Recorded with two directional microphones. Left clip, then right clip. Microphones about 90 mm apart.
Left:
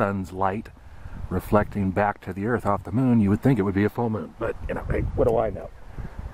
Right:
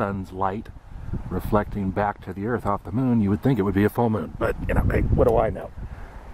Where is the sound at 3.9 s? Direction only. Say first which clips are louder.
Right 4 dB; 20° right (ahead or behind).